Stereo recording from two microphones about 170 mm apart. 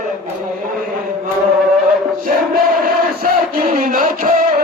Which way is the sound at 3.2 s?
55° right (ahead or behind).